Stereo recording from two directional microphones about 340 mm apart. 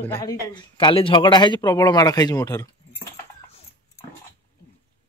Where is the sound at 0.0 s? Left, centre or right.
Centre.